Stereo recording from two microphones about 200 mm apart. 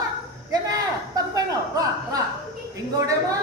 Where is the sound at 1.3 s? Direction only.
20° right (ahead or behind).